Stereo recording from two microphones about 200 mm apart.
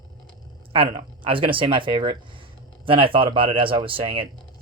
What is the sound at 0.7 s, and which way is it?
Speech, 25° right (ahead or behind).